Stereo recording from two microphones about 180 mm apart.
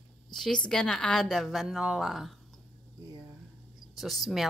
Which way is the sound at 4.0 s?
Centre (ahead or behind).